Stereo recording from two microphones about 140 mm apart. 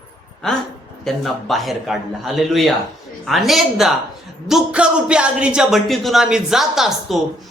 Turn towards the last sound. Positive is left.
turn(degrees=0)  # may be behind; listen again after turning